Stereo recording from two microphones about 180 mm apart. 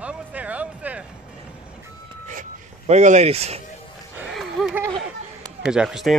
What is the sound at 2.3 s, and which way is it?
Speech, 40° right (ahead or behind).